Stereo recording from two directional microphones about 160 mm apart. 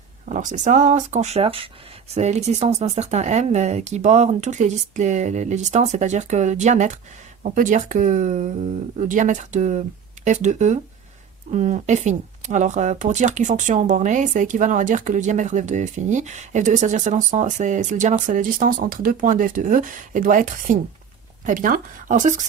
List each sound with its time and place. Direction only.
0.3 s speech: 50° right (ahead or behind); by 1.7 s 35° right (ahead or behind)
2.1 s speech: 45° right (ahead or behind)